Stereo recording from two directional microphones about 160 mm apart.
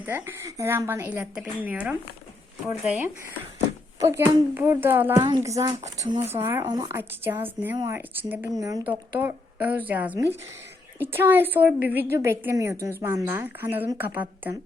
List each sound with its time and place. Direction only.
0.0 s speech: 15° right (ahead or behind)
4.0 s speech: 20° right (ahead or behind)